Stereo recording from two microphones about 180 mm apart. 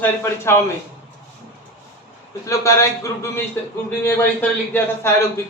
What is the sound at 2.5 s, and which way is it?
Speech, 15° left (ahead or behind).